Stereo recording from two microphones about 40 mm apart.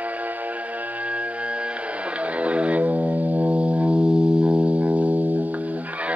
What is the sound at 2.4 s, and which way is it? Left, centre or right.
Music, right.